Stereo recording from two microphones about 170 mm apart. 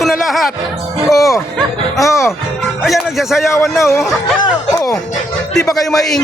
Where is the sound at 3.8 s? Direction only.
15° left (ahead or behind).